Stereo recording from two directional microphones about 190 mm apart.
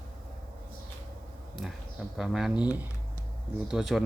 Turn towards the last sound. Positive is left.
turn(degrees=0)  # may be behind; listen again after turning